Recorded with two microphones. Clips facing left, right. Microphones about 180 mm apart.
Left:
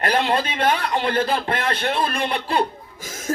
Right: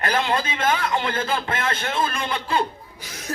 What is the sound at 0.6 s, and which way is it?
A man's voice, 35° left (ahead or behind).